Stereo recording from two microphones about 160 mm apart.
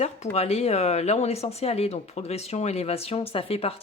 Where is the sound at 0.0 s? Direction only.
40° left (ahead or behind).